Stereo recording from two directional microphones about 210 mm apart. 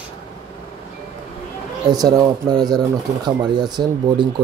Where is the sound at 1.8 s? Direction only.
20° right (ahead or behind).